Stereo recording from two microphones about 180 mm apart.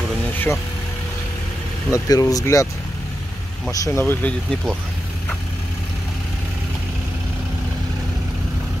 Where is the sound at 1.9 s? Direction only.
20° left (ahead or behind).